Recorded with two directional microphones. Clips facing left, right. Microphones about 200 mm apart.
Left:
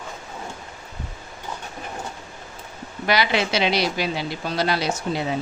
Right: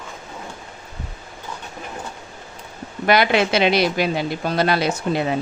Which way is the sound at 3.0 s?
55° right (ahead or behind).